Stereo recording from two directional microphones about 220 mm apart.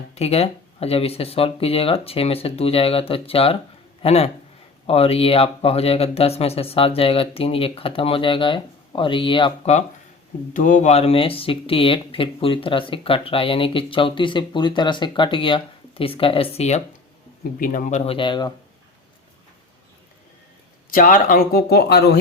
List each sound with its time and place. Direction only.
0.1 s speech: 30° left (ahead or behind)
20.9 s speech: 40° left (ahead or behind)